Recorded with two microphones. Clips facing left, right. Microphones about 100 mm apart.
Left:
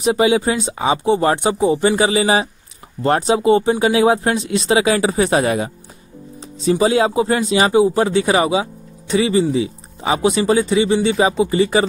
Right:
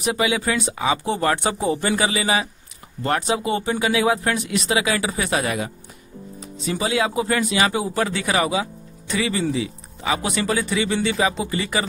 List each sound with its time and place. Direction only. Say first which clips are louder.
0.0 s speech: left 7 dB; 30° left (ahead or behind)